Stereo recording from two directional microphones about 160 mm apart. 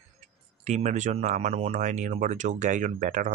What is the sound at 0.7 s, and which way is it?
Speech, 50° right (ahead or behind).